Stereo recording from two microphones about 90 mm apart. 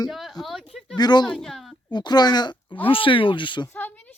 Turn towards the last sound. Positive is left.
turn(degrees=15)  # may be behind; listen again after turning